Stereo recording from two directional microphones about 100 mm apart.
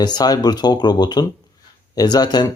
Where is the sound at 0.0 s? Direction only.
45° left (ahead or behind).